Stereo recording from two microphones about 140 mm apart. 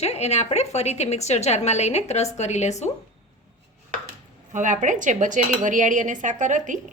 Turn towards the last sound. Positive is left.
turn(degrees=-65)  # may be behind; listen again after turning